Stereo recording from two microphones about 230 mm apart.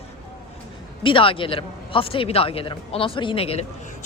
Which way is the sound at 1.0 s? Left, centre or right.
Left.